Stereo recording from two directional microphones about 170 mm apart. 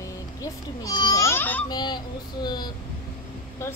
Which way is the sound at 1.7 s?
25° left (ahead or behind).